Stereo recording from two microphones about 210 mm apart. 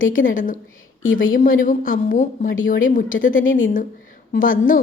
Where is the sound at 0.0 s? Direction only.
40° left (ahead or behind).